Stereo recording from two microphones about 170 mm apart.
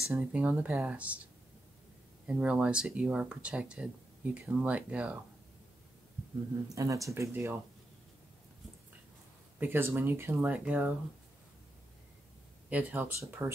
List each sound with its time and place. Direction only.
0.0 s speech: 5° right (ahead or behind)
2.2 s speech: 5° right (ahead or behind)
6.7 s speech: 20° right (ahead or behind)
9.6 s speech: 15° right (ahead or behind)
12.6 s speech: 10° right (ahead or behind)